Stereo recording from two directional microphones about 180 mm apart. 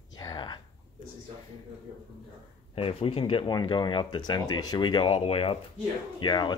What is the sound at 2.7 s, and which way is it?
Speech, 30° left (ahead or behind).